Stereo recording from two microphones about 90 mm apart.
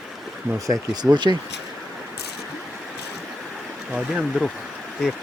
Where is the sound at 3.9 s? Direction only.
10° right (ahead or behind).